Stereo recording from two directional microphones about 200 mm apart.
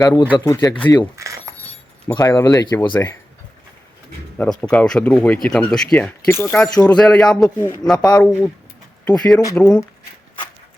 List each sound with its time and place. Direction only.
0.0 s speech: 20° left (ahead or behind)
1.1 s a sound: 15° right (ahead or behind)
2.0 s speech: 20° left (ahead or behind)
4.7 s a man's voice: 5° left (ahead or behind)